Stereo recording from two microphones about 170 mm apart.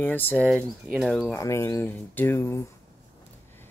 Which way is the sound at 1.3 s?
15° left (ahead or behind).